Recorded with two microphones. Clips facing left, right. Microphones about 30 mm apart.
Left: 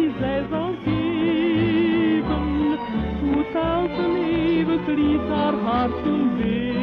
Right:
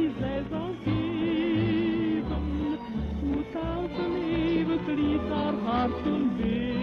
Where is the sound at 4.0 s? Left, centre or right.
Left.